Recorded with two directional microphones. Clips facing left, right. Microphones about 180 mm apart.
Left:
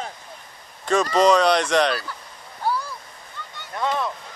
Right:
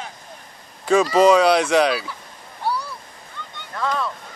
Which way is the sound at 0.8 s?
5° right (ahead or behind).